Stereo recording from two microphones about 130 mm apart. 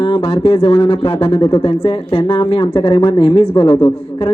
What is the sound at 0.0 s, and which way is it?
Speech, 40° left (ahead or behind).